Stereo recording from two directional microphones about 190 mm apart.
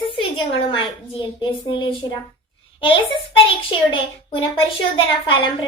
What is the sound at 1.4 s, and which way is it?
A child's voice, 25° left (ahead or behind).